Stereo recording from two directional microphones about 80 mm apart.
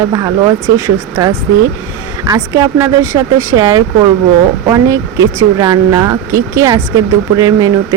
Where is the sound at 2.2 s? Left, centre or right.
Right.